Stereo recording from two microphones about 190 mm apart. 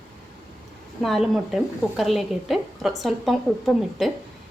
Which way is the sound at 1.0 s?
Centre (ahead or behind).